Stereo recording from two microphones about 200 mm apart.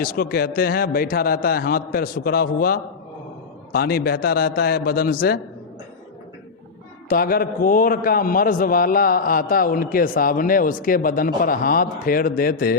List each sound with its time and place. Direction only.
0.0 s a man's voice: 45° left (ahead or behind)
7.1 s a man's voice: 45° left (ahead or behind)